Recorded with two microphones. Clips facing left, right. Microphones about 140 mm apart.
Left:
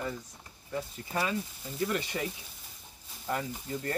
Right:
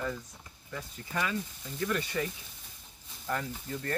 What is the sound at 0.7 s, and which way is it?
Speech, 30° left (ahead or behind).